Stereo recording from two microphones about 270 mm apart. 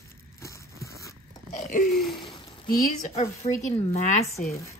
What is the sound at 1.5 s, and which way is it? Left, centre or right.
Speech, left.